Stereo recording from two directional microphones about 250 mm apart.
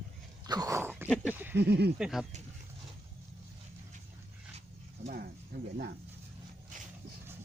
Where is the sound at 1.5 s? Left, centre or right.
Right.